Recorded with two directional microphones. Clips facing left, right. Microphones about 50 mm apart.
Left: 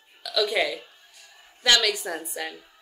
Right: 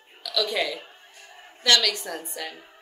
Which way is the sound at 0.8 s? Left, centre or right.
Right.